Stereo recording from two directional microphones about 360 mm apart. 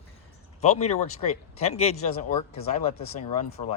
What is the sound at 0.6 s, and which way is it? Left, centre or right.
Speech, centre.